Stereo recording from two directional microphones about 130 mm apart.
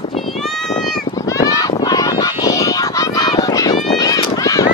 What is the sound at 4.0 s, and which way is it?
Run, 25° left (ahead or behind).